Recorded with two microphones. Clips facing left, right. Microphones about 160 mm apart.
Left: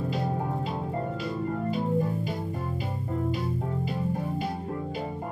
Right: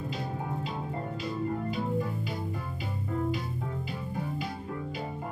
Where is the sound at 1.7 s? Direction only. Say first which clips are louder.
Left 4 dB; 50° left (ahead or behind).